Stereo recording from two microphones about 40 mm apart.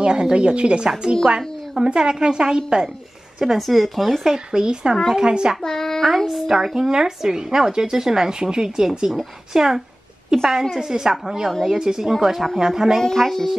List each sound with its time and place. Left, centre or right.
0.0 s a woman's voice: right
3.5 s speech: centre
4.5 s a woman's voice: centre
5.6 s speech: centre
10.3 s speech: centre
10.8 s speech: centre
13.0 s a woman's voice: centre